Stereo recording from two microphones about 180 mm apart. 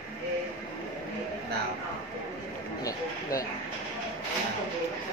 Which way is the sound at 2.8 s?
20° left (ahead or behind).